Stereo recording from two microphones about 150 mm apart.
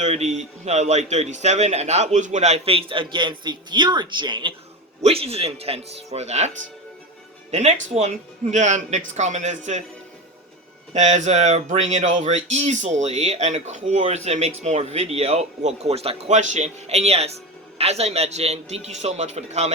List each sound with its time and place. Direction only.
0.0 s speech: 45° right (ahead or behind)
7.5 s speech: 50° right (ahead or behind)
10.9 s speech: 50° right (ahead or behind)